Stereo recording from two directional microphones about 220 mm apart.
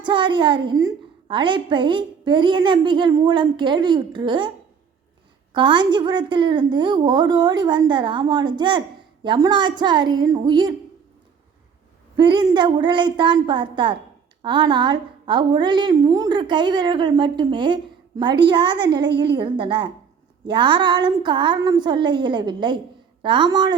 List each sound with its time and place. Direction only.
0.0 s a woman's voice: 20° right (ahead or behind)
5.5 s a woman's voice: 20° right (ahead or behind)
12.1 s a woman's voice: 20° right (ahead or behind)